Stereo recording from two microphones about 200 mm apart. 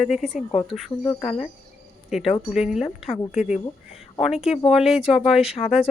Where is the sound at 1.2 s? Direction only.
30° left (ahead or behind).